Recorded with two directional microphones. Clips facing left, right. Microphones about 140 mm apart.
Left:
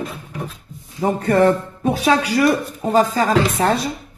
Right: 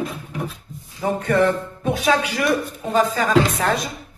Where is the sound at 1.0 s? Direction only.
35° left (ahead or behind).